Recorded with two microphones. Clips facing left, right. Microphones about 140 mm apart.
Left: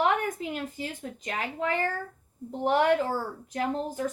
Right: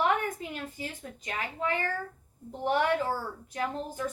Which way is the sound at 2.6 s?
45° left (ahead or behind).